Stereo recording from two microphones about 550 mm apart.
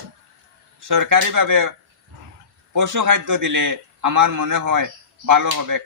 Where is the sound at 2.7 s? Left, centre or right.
Right.